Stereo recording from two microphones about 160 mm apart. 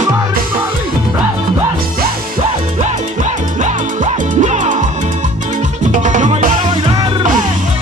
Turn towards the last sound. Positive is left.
turn(degrees=-50)  # may be behind; listen again after turning